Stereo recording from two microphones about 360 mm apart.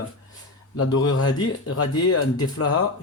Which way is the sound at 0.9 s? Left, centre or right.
Left.